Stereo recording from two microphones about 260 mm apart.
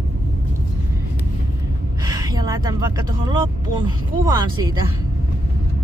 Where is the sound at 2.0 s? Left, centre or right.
Centre.